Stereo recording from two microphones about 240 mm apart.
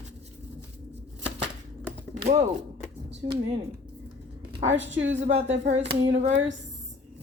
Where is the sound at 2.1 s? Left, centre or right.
Right.